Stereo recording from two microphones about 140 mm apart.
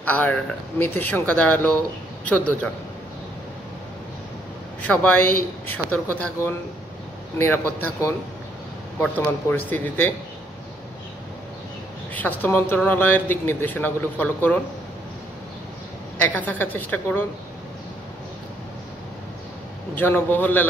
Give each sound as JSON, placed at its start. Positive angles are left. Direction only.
{"t": 0.0, "sound": "speech", "side_deg": 10}
{"t": 4.8, "sound": "speech", "side_deg": 15}
{"t": 7.3, "sound": "speech", "side_deg": 15}
{"t": 12.4, "sound": "speech", "side_deg": 15}
{"t": 16.2, "sound": "speech", "side_deg": 10}
{"t": 20.0, "sound": "speech", "side_deg": 15}